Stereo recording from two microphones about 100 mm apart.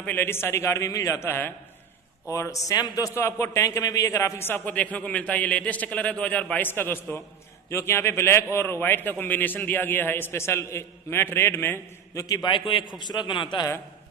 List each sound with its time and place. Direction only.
0.0 s a man's voice: 20° left (ahead or behind)
12.4 s a man's voice: 55° left (ahead or behind)